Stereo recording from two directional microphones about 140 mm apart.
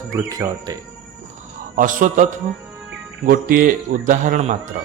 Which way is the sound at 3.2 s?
90° right.